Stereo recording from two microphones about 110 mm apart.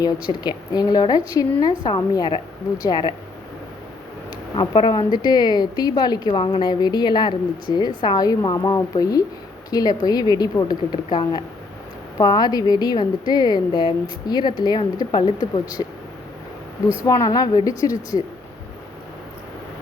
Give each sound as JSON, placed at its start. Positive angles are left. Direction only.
{"t": 0.0, "sound": "speech", "side_deg": 40}
{"t": 4.5, "sound": "speech", "side_deg": 45}
{"t": 17.0, "sound": "speech", "side_deg": 30}